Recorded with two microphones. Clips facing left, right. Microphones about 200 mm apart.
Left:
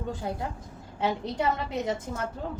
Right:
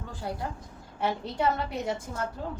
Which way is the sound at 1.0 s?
20° left (ahead or behind).